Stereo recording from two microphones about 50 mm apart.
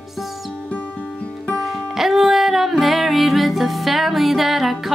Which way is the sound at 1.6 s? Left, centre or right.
Centre.